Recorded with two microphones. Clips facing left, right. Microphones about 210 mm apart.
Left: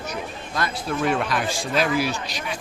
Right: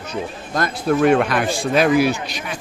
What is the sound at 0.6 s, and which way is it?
A man's voice, 50° right (ahead or behind).